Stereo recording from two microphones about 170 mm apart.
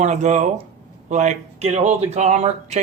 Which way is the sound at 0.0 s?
45° right (ahead or behind).